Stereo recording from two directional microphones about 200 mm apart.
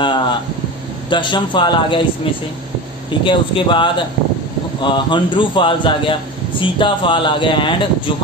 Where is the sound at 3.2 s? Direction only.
25° left (ahead or behind).